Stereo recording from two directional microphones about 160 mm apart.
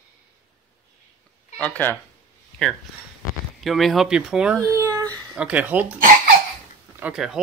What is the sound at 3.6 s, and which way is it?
Speech, centre (ahead or behind).